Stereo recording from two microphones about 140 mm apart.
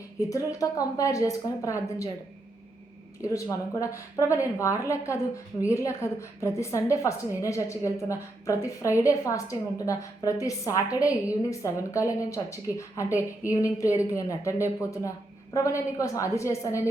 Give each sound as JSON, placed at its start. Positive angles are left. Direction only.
{"t": 0.3, "sound": "a woman's voice", "side_deg": 25}
{"t": 3.2, "sound": "a woman's voice", "side_deg": 25}